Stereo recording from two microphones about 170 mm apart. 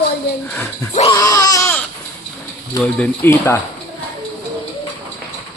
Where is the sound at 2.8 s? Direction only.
10° left (ahead or behind).